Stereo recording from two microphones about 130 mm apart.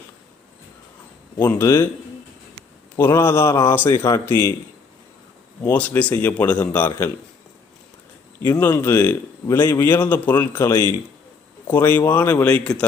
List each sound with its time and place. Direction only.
1.5 s a man's voice: 25° left (ahead or behind)
2.9 s a man's voice: 15° left (ahead or behind)
5.7 s a man's voice: 10° left (ahead or behind)
8.7 s a man's voice: 20° left (ahead or behind)